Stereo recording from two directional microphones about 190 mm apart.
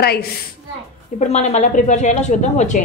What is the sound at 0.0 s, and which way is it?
Speech, 55° left (ahead or behind).